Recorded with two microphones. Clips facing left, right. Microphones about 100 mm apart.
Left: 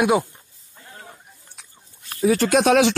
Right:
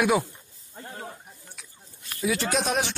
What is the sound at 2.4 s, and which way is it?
Speech, 75° left (ahead or behind).